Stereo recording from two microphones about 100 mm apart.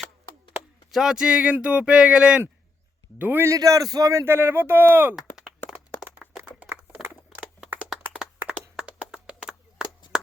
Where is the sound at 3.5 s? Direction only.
35° right (ahead or behind).